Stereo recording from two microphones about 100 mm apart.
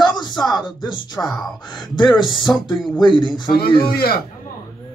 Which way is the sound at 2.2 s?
55° left (ahead or behind).